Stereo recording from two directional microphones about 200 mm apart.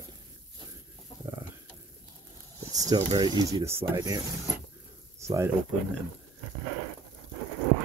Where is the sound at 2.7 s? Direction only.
20° right (ahead or behind).